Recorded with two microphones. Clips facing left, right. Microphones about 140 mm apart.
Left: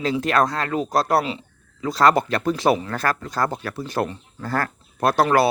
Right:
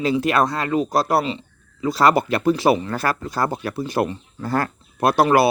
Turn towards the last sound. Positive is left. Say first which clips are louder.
# right 2 dB
turn(degrees=-10)  # may be behind; listen again after turning